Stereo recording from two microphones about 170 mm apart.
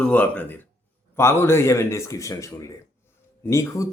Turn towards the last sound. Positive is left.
turn(degrees=15)  # may be behind; listen again after turning